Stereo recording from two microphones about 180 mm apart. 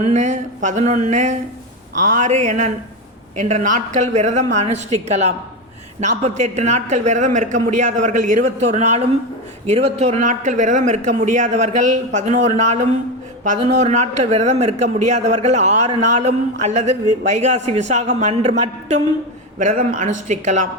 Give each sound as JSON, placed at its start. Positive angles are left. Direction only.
{"t": 0.0, "sound": "a man's voice", "side_deg": -40}